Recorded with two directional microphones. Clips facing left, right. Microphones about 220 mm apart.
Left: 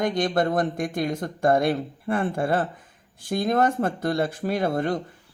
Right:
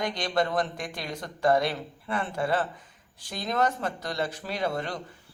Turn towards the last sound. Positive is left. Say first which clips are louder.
# left 6 dB
turn(degrees=50)  # may be behind; listen again after turning